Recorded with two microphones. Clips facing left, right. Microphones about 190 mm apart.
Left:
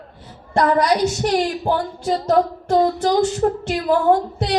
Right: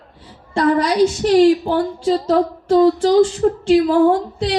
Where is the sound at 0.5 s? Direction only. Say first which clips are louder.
Right 2 dB; 50° left (ahead or behind).